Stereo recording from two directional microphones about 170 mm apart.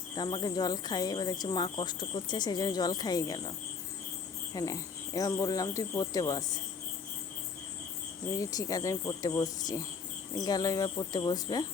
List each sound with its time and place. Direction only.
0.2 s speech: 25° left (ahead or behind)
4.5 s speech: 20° left (ahead or behind)
8.4 s speech: 20° left (ahead or behind)